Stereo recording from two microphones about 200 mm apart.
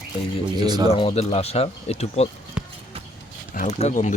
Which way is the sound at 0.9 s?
30° left (ahead or behind).